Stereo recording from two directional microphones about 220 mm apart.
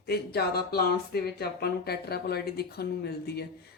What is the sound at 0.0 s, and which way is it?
Speech, 45° left (ahead or behind).